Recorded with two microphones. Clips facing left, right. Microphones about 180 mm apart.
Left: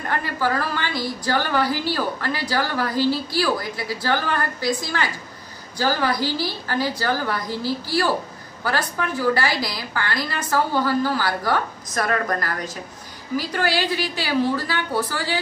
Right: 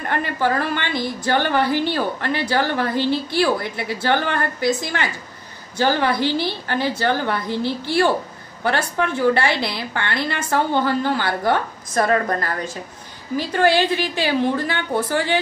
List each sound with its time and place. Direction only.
0.4 s a woman's voice: 20° right (ahead or behind)
9.5 s a woman's voice: 65° right (ahead or behind)
9.8 s a woman's voice: 25° right (ahead or behind)